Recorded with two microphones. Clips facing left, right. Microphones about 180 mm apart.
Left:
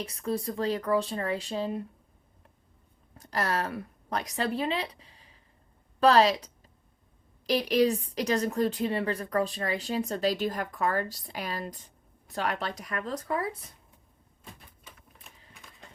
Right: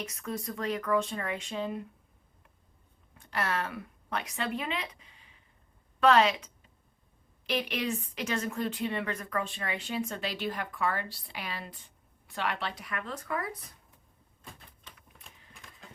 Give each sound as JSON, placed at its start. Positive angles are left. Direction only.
{"t": 0.0, "sound": "a woman's voice", "side_deg": 30}
{"t": 3.2, "sound": "a woman's voice", "side_deg": 40}
{"t": 14.9, "sound": "typewriter", "side_deg": 10}